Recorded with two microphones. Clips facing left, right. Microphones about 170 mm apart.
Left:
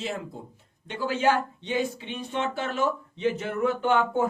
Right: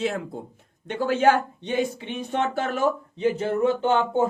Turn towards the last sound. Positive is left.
turn(degrees=-25)  # may be behind; listen again after turning